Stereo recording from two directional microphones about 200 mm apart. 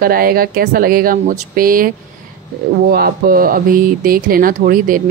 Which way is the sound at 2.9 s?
50° right (ahead or behind).